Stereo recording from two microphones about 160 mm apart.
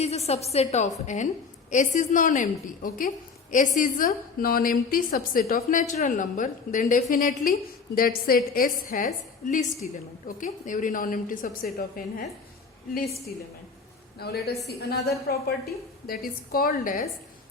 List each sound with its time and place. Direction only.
0.0 s a woman's voice: 40° left (ahead or behind); by 5.8 s 65° left (ahead or behind)
5.9 s a woman's voice: 55° left (ahead or behind)
14.2 s a woman's voice: 85° left; by 17.1 s 55° left (ahead or behind)